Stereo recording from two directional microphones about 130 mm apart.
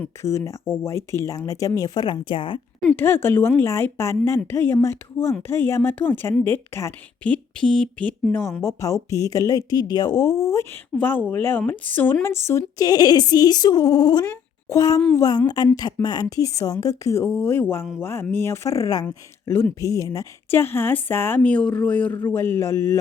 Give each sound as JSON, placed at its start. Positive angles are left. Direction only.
{"t": 0.0, "sound": "speech", "side_deg": 20}
{"t": 2.9, "sound": "a woman's voice", "side_deg": 15}
{"t": 7.5, "sound": "a woman's voice", "side_deg": 5}